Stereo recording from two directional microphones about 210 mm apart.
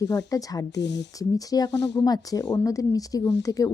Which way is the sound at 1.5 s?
20° left (ahead or behind).